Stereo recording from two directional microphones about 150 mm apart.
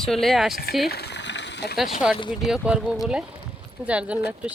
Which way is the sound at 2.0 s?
5° right (ahead or behind).